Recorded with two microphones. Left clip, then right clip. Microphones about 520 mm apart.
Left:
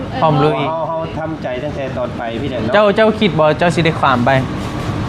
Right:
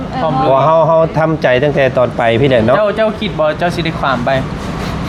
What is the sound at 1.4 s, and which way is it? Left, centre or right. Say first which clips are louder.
Speech: right 14 dB; right.